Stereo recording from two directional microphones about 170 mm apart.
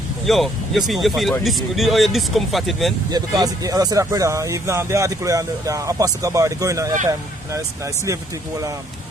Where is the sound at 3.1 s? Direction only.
20° right (ahead or behind).